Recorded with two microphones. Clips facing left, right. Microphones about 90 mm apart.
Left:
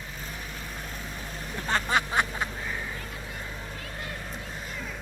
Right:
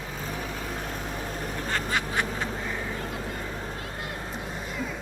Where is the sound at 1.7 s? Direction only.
25° left (ahead or behind).